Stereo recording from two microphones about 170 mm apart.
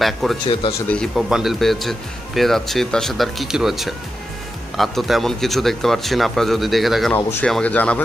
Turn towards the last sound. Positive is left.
turn(degrees=10)  # may be behind; listen again after turning